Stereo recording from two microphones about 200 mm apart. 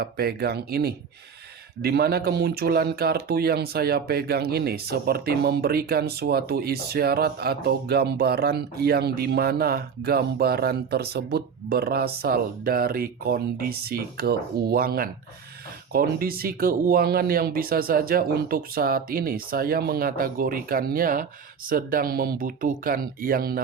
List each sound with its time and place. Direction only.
0.0 s speech: 50° right (ahead or behind)